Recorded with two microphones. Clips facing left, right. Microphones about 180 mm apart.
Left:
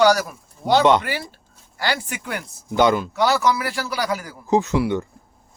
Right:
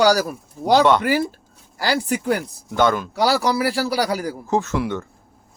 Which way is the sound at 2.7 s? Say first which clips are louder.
Left 1 dB; 15° left (ahead or behind).